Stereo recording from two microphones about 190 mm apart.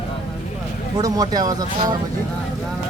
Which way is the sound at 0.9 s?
20° right (ahead or behind).